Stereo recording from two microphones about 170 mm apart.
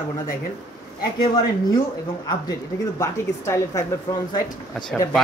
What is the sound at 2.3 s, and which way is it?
Speech, 20° left (ahead or behind).